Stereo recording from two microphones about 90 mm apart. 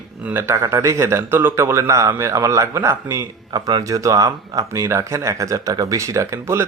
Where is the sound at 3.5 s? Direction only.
50° right (ahead or behind).